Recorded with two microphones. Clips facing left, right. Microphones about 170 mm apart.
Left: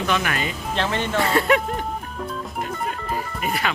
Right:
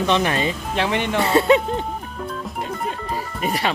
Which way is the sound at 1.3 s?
25° right (ahead or behind).